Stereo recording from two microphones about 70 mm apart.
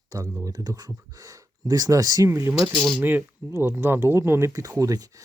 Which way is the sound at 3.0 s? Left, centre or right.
Right.